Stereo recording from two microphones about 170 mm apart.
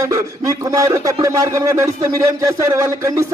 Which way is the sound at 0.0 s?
20° right (ahead or behind).